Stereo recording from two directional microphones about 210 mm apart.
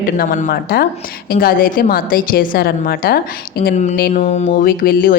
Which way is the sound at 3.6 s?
35° left (ahead or behind).